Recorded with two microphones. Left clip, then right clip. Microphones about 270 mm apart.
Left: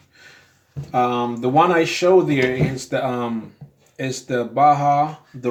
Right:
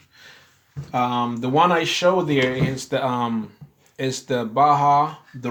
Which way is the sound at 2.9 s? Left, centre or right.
Right.